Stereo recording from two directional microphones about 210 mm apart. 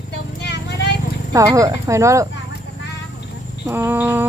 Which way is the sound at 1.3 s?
15° right (ahead or behind).